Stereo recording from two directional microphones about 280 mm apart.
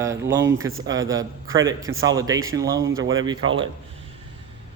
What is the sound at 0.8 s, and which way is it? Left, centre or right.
Speech, centre.